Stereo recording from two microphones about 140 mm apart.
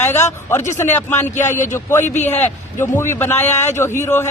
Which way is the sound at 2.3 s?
15° left (ahead or behind).